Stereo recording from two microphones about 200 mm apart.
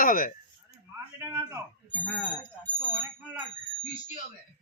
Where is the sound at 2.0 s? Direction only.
5° left (ahead or behind).